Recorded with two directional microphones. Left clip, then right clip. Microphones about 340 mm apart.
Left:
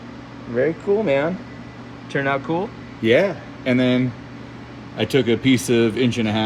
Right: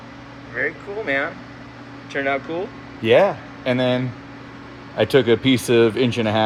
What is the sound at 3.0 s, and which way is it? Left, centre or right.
A man's voice, centre.